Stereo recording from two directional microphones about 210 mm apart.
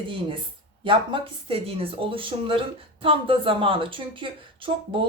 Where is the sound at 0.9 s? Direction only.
25° right (ahead or behind).